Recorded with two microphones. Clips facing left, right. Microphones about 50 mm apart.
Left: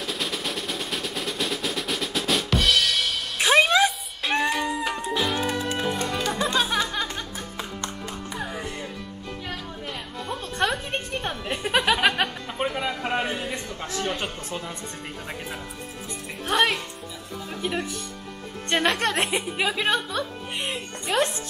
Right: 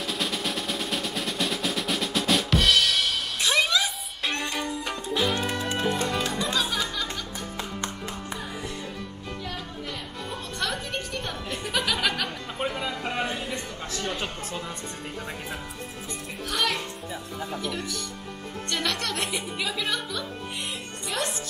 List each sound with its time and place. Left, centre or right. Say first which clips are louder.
0.0 s percussion: even; centre
3.3 s music: left 7 dB; left
4.2 s music: left 6 dB; centre
6.4 s music: left 3 dB; left
6.7 s music: left 4 dB; left
9.8 s music: left 6 dB; centre
10.6 s music: left 5 dB; left
11.6 s a sound: left 6 dB; left
12.6 s a sound: left 3 dB; centre
14.1 s music: left 1 dB; centre
16.4 s music: left 5 dB; left